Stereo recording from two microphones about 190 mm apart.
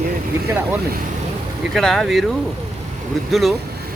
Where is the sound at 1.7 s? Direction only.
Centre (ahead or behind).